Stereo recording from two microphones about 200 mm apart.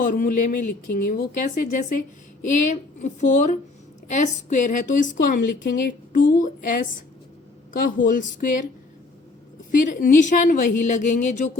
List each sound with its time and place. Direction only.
0.0 s a woman's voice: 45° left (ahead or behind)
9.8 s speech: 40° left (ahead or behind)